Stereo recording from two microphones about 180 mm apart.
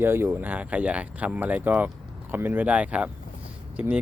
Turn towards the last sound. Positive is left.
turn(degrees=-10)  # may be behind; listen again after turning